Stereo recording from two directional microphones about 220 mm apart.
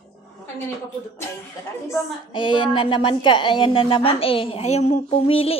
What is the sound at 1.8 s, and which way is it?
A woman's voice, 20° left (ahead or behind).